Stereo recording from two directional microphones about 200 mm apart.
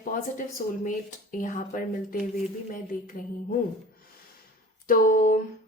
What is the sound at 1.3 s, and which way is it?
Speech, 40° left (ahead or behind).